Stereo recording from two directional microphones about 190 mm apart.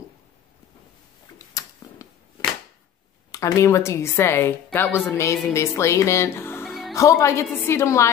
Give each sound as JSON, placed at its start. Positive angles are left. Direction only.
{"t": 1.6, "sound": "a sound", "side_deg": 20}
{"t": 3.3, "sound": "speech", "side_deg": 20}
{"t": 6.6, "sound": "music", "side_deg": 0}
{"t": 7.0, "sound": "speech", "side_deg": 15}